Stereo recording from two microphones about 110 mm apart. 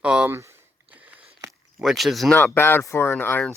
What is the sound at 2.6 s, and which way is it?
Speech, 20° left (ahead or behind).